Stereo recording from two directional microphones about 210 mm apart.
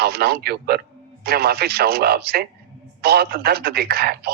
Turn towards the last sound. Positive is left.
turn(degrees=-50)  # may be behind; listen again after turning